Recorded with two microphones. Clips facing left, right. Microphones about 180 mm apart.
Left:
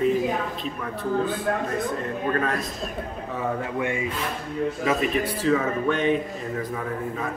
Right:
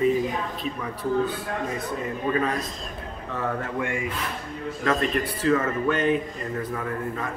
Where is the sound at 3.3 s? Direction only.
15° left (ahead or behind).